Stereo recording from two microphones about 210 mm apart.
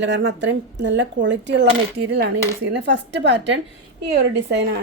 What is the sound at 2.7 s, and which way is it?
Speech, 55° right (ahead or behind).